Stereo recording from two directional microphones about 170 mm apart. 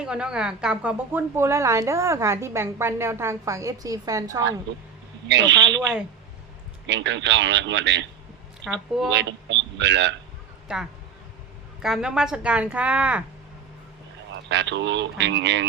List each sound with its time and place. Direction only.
0.0 s a woman's voice: 5° right (ahead or behind)
5.3 s speech: 90° right
6.8 s speech: 90° right
8.6 s speech: centre (ahead or behind)
9.0 s speech: 90° right
11.8 s a woman's voice: 5° right (ahead or behind)
14.5 s speech: 90° right